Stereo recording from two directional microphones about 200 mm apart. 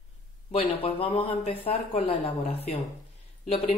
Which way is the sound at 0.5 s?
30° left (ahead or behind).